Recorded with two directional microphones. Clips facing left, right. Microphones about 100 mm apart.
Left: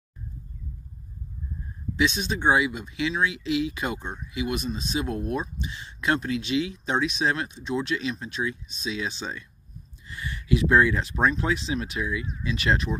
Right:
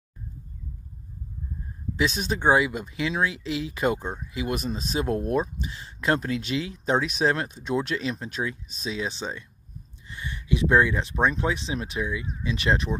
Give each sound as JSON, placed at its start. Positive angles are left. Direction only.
{"t": 2.0, "sound": "speech", "side_deg": -45}